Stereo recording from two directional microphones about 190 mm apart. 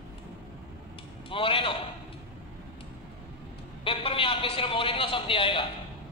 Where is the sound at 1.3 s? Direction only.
30° left (ahead or behind).